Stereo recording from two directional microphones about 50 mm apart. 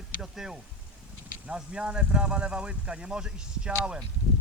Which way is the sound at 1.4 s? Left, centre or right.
Right.